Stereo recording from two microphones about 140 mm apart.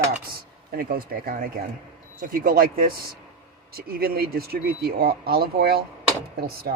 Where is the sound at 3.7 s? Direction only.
90° right.